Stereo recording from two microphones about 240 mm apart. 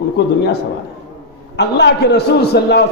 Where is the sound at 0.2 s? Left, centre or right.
Left.